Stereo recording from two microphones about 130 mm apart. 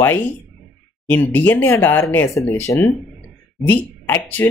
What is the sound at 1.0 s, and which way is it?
Speech, 15° left (ahead or behind).